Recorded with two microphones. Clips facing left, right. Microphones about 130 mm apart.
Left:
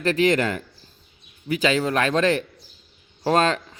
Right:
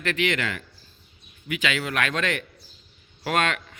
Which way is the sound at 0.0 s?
35° left (ahead or behind).